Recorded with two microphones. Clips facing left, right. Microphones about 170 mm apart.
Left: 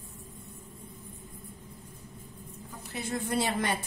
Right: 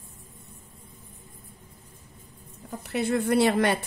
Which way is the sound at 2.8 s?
65° right (ahead or behind).